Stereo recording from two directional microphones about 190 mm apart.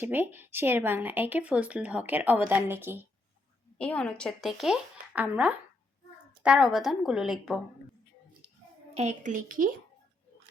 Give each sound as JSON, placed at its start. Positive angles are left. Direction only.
{"t": 0.0, "sound": "speech", "side_deg": -10}
{"t": 3.8, "sound": "speech", "side_deg": 5}
{"t": 9.0, "sound": "a woman's voice", "side_deg": -40}